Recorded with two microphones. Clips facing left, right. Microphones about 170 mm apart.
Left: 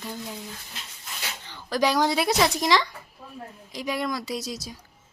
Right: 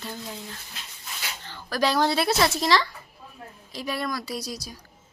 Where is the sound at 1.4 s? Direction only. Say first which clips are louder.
Left 1 dB; 15° left (ahead or behind).